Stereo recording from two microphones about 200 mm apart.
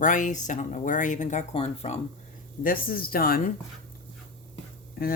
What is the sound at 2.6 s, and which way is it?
Speech, 45° left (ahead or behind).